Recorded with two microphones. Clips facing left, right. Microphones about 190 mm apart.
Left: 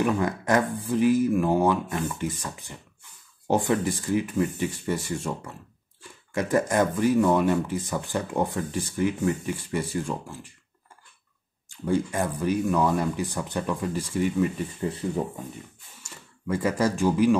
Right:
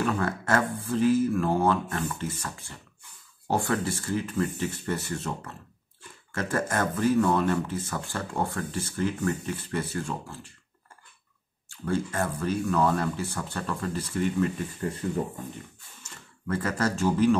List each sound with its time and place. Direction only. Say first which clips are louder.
0.0 s speech: left 3 dB; 15° left (ahead or behind)
11.7 s speech: left 3 dB; 15° left (ahead or behind)
16.0 s speech: left 2 dB; 10° left (ahead or behind)